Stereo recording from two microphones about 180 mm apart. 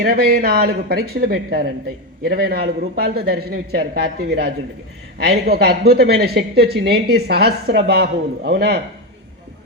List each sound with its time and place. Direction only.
0.0 s speech: 60° right (ahead or behind)